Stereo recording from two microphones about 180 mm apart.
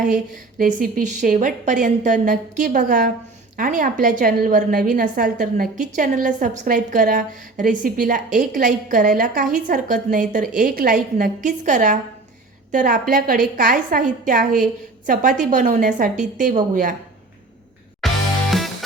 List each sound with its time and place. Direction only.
0.6 s a woman's voice: 50° right (ahead or behind)
18.0 s music: centre (ahead or behind)